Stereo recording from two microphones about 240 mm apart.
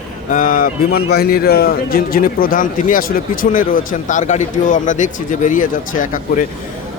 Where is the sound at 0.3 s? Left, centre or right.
Left.